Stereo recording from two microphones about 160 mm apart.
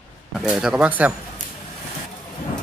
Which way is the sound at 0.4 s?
5° right (ahead or behind).